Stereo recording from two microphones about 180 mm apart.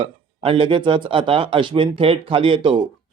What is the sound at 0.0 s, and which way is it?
Speech, 30° right (ahead or behind).